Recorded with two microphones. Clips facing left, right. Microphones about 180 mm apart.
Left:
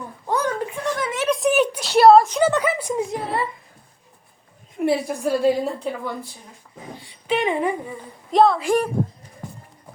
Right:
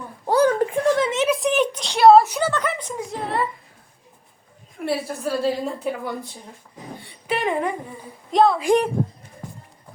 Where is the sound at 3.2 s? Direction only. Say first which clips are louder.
Right 1 dB; centre (ahead or behind).